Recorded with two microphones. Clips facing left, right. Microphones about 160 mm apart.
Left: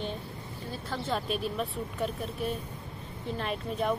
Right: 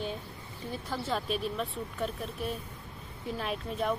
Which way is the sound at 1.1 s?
Centre (ahead or behind).